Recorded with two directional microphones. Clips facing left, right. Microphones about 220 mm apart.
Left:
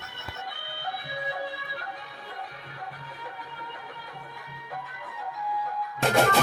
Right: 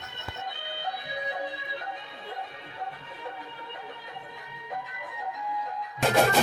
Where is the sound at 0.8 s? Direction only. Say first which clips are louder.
Even; 20° right (ahead or behind).